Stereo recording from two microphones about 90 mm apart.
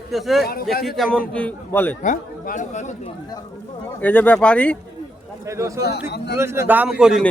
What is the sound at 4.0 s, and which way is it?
Speech, 20° left (ahead or behind).